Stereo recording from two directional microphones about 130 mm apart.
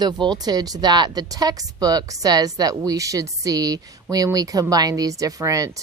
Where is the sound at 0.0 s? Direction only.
35° right (ahead or behind).